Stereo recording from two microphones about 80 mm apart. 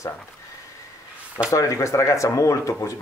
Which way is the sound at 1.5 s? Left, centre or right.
Left.